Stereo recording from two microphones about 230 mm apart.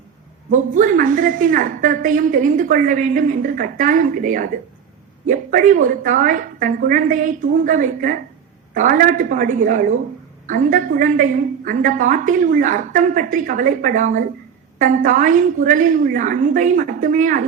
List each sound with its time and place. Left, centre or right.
0.5 s a woman's voice: right